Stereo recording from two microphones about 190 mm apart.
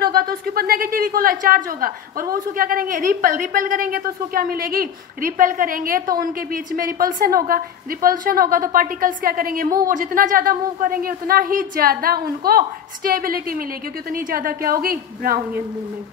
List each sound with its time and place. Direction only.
0.0 s a woman's voice: 55° right (ahead or behind)